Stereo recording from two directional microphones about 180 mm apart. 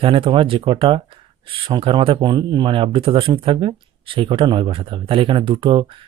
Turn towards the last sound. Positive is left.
turn(degrees=-30)  # may be behind; listen again after turning